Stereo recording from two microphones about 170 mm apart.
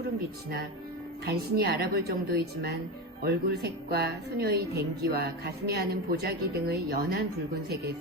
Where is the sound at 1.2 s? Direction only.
65° right (ahead or behind).